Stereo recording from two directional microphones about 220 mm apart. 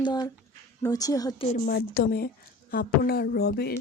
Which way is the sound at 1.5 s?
45° left (ahead or behind).